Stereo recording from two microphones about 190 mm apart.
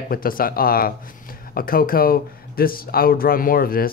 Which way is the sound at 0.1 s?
50° left (ahead or behind).